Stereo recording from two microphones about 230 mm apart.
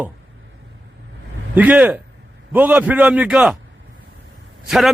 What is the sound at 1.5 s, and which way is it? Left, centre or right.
A man's voice, centre.